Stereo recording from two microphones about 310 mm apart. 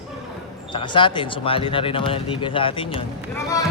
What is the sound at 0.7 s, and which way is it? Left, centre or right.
Speech, centre.